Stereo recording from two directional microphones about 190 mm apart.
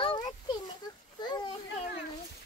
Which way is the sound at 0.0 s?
25° left (ahead or behind).